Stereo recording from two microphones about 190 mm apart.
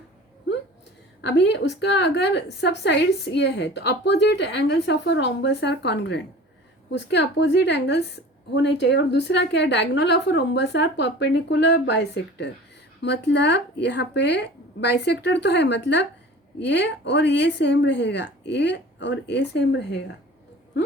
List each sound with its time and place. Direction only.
1.2 s a woman's voice: 65° left (ahead or behind)